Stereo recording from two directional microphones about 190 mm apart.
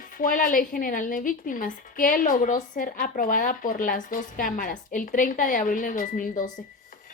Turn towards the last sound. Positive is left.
turn(degrees=45)  # may be behind; listen again after turning